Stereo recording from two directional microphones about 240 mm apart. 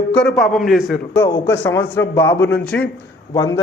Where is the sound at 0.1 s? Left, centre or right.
Centre.